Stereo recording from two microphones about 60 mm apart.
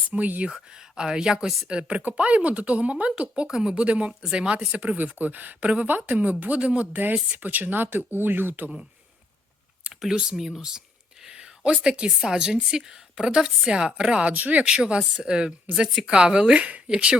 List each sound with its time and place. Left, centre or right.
0.1 s speech: right
0.5 s speech: centre
4.8 s speech: right
9.9 s speech: centre
14.3 s speech: right
14.7 s speech: centre